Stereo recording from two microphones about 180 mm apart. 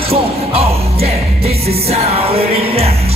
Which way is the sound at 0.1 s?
35° right (ahead or behind).